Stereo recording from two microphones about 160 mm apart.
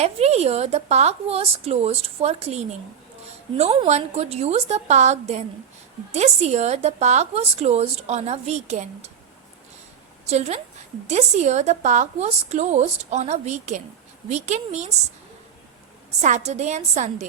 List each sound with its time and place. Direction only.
0.0 s a woman's voice: 40° right (ahead or behind)
10.2 s a woman's voice: 40° right (ahead or behind)
16.2 s a woman's voice: 45° right (ahead or behind)